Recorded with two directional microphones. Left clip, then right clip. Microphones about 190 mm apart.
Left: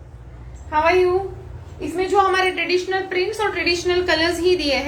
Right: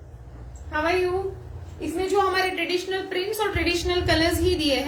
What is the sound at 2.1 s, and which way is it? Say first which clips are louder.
A woman's voice: left 5 dB; 20° right (ahead or behind).